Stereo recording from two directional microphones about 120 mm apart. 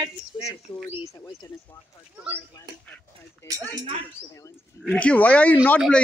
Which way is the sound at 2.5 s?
30° left (ahead or behind).